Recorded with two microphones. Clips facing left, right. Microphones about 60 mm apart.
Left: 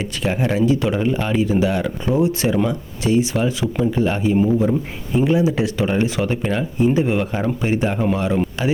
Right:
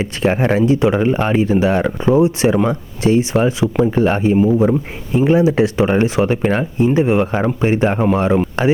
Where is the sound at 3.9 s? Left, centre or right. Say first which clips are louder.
Right 4 dB; right.